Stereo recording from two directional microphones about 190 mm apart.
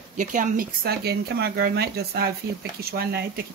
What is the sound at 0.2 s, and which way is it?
Speech, 45° right (ahead or behind).